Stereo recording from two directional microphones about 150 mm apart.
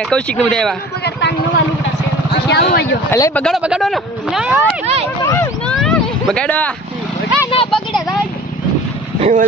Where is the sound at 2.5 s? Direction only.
90° left.